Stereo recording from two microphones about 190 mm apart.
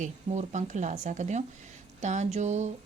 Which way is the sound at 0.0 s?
40° right (ahead or behind).